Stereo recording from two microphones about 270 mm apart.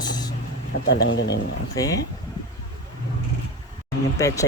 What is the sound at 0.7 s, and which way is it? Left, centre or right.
Speech, left.